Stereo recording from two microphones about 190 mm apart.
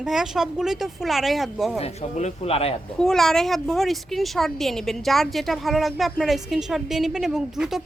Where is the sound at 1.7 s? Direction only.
30° left (ahead or behind).